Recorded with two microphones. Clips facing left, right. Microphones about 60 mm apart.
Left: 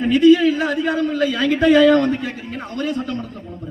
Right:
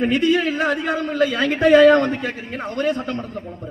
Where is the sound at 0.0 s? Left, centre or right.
Right.